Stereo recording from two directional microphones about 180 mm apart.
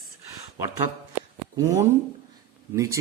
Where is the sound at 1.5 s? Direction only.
20° right (ahead or behind).